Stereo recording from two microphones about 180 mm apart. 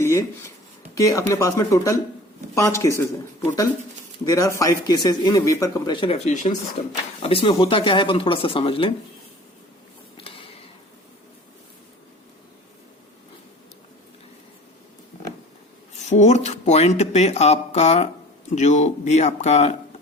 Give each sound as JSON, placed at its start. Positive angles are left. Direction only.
{"t": 0.0, "sound": "speech", "side_deg": 15}
{"t": 7.2, "sound": "speech", "side_deg": 30}
{"t": 10.2, "sound": "mechanisms", "side_deg": 30}
{"t": 16.0, "sound": "speech", "side_deg": 40}